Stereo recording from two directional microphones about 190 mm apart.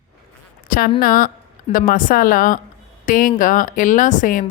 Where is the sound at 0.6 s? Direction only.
45° left (ahead or behind).